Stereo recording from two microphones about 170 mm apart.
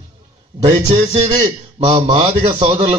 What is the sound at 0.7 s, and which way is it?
A man's voice, 45° right (ahead or behind).